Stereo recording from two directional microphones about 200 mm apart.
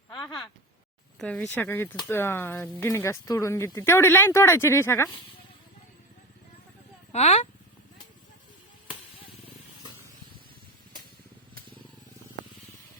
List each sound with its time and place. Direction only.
0.1 s a sound: 20° left (ahead or behind)
1.2 s speech: 5° left (ahead or behind)
7.1 s speech: 35° left (ahead or behind)